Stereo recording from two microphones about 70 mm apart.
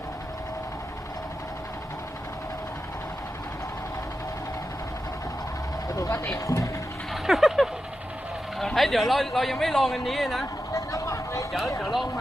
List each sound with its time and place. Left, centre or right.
5.9 s vehicle: left
6.3 s speech: left
7.1 s a sound: centre
8.5 s a man's voice: centre
10.8 s vehicle: left
11.8 s a man's voice: centre